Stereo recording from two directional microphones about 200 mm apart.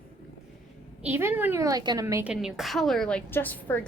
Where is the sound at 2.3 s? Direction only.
5° right (ahead or behind).